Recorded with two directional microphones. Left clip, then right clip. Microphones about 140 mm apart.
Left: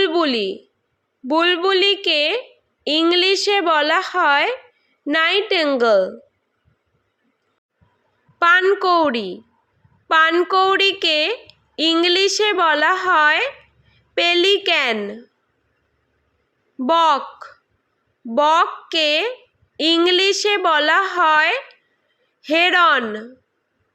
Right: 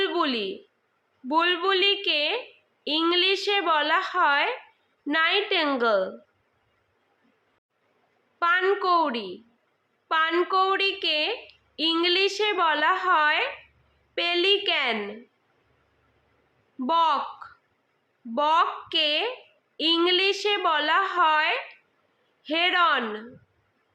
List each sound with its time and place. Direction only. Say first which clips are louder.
0.0 s a sound: left 7 dB; 45° left (ahead or behind)
1.3 s a woman's voice: left 6 dB; 45° left (ahead or behind)
8.4 s a woman's voice: left 8 dB; 55° left (ahead or behind)
16.8 s a woman's voice: left 7 dB; 55° left (ahead or behind)